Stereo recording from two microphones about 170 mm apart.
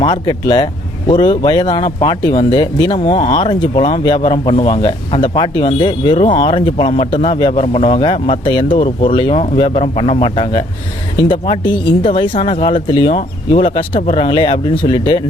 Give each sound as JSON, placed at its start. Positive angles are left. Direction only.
{"t": 0.0, "sound": "speech", "side_deg": 30}
{"t": 8.8, "sound": "speech", "side_deg": 45}
{"t": 9.1, "sound": "speech", "side_deg": 30}